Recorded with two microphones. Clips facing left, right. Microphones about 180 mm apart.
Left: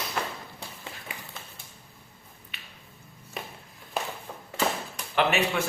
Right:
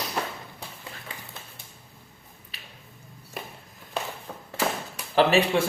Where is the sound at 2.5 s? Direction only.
35° right (ahead or behind).